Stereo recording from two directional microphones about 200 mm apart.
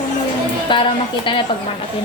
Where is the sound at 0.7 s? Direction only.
25° left (ahead or behind).